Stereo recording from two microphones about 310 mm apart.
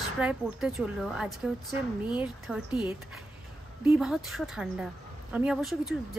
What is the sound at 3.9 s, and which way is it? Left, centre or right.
A woman's voice, centre.